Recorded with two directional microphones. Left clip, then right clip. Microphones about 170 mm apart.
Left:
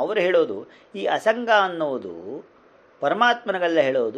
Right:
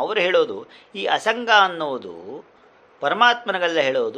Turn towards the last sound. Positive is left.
turn(degrees=15)  # may be behind; listen again after turning